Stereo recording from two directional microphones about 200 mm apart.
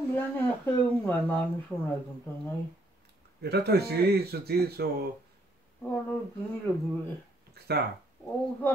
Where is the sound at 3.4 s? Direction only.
55° right (ahead or behind).